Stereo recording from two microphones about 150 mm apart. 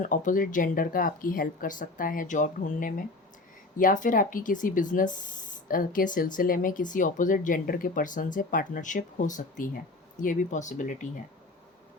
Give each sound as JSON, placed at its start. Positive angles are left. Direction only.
{"t": 0.0, "sound": "speech", "side_deg": 60}